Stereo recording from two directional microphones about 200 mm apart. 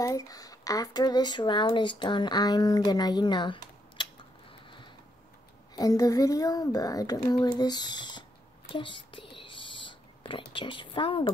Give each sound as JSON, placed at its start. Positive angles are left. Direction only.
{"t": 0.0, "sound": "speech", "side_deg": 15}
{"t": 4.0, "sound": "tick-tock", "side_deg": 25}
{"t": 5.8, "sound": "speech", "side_deg": 20}
{"t": 8.7, "sound": "whispering", "side_deg": 25}
{"t": 10.5, "sound": "speech", "side_deg": 25}